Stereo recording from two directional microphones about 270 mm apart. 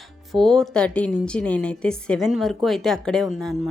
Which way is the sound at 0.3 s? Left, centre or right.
Centre.